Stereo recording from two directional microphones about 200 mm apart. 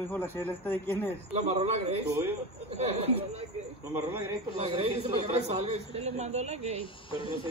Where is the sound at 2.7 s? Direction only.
30° right (ahead or behind).